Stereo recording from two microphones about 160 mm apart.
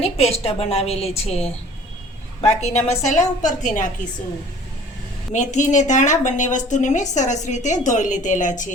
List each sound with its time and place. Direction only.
0.0 s a woman's voice: 40° left (ahead or behind)
2.6 s a woman's voice: 45° left (ahead or behind)
5.3 s a woman's voice: 50° left (ahead or behind)